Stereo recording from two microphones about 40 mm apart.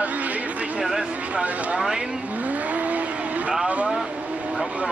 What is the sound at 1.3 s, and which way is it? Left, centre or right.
Speech, right.